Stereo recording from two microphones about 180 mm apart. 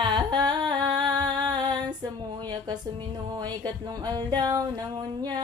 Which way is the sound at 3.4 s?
25° right (ahead or behind).